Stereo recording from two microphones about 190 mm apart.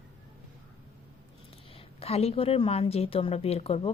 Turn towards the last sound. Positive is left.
turn(degrees=30)  # may be behind; listen again after turning